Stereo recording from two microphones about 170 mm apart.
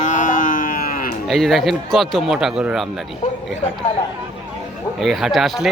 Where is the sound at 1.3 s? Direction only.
Centre (ahead or behind).